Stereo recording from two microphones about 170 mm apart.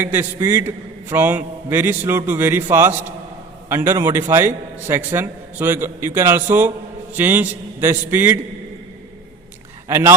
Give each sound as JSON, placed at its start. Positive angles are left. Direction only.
{"t": 0.0, "sound": "a man's voice", "side_deg": -15}
{"t": 9.9, "sound": "a man's voice", "side_deg": -15}